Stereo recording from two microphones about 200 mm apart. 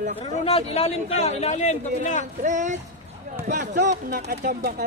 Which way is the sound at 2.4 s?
40° right (ahead or behind).